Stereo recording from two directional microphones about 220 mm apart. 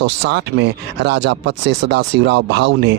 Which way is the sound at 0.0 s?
50° right (ahead or behind).